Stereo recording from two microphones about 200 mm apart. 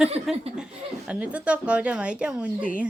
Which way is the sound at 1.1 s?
5° right (ahead or behind).